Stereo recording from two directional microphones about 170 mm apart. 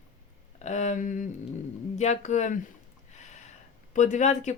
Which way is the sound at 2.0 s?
45° left (ahead or behind).